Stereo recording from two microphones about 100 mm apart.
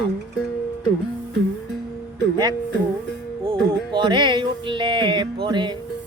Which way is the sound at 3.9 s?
50° right (ahead or behind).